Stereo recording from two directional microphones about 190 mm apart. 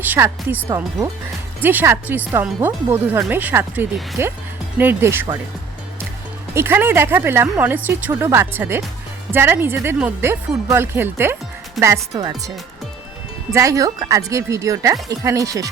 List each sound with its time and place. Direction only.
0.0 s speech: 10° right (ahead or behind)
6.5 s speech: 10° right (ahead or behind)
13.5 s speech: 15° right (ahead or behind)